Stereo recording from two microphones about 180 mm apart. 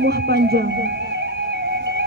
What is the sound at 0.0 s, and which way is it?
Music, 65° right (ahead or behind).